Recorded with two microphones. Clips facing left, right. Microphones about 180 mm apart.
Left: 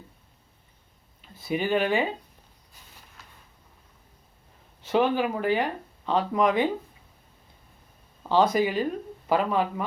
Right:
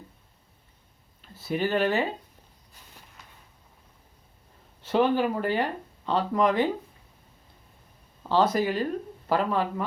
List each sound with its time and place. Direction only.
1.5 s speech: 10° left (ahead or behind)
4.8 s speech: 10° left (ahead or behind)
8.5 s speech: 15° left (ahead or behind)